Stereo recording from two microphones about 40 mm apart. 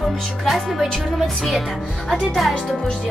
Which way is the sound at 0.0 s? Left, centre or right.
Centre.